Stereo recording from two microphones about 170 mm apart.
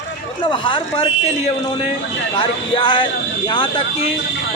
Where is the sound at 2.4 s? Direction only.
30° left (ahead or behind).